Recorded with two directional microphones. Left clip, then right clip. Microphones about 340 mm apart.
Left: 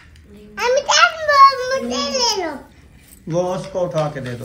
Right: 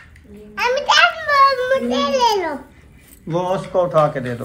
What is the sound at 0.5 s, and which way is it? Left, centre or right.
A child's voice, left.